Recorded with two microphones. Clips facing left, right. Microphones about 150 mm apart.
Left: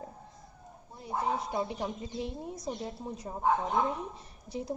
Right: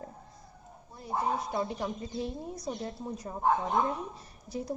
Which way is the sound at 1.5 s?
20° left (ahead or behind).